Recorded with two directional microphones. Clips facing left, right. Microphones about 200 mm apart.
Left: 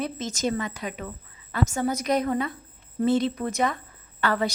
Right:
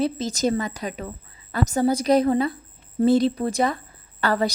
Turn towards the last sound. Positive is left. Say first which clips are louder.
# right 3 dB
turn(degrees=-35)  # may be behind; listen again after turning